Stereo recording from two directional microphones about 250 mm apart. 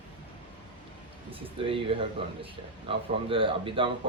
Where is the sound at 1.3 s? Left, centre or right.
Right.